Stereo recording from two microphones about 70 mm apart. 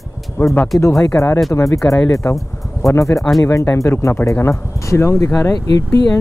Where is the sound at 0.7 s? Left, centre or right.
Left.